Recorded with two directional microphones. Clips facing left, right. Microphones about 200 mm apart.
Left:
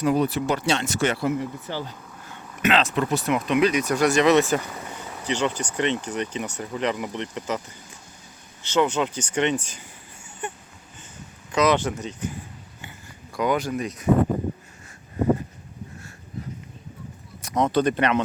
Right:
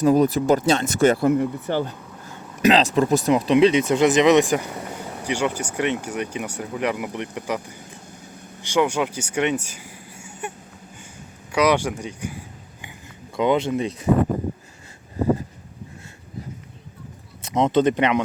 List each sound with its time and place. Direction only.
0.0 s speech: 45° right (ahead or behind)
2.6 s speech: 35° right (ahead or behind); by 7.6 s 10° right (ahead or behind)
8.6 s speech: 10° right (ahead or behind)
11.5 s speech: 10° right (ahead or behind)
13.3 s speech: 25° right (ahead or behind)
17.4 s speech: 20° right (ahead or behind)